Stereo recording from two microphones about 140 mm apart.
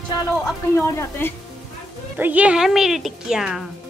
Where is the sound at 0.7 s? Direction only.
15° left (ahead or behind).